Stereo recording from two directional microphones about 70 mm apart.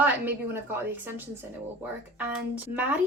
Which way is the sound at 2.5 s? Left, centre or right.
Right.